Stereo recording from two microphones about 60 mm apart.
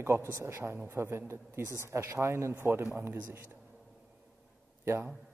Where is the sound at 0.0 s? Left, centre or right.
Right.